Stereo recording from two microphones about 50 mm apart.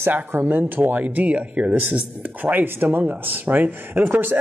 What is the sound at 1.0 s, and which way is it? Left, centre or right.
Speech, right.